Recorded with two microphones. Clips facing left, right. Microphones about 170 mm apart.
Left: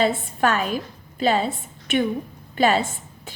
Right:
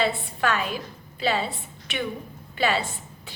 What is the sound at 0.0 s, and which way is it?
A woman's voice, 45° left (ahead or behind).